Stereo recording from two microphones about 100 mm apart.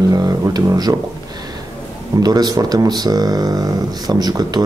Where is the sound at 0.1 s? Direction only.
40° right (ahead or behind).